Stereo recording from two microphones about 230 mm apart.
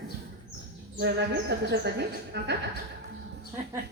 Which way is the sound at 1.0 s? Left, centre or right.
Right.